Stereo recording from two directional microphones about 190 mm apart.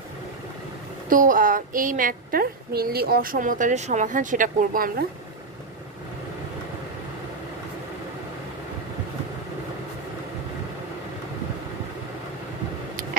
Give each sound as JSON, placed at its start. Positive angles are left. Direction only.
{"t": 1.0, "sound": "a woman's voice", "side_deg": -45}